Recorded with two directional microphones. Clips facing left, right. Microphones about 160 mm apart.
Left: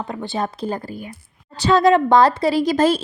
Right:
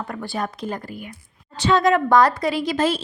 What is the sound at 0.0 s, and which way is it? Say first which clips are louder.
Speech: left 3 dB; 20° left (ahead or behind).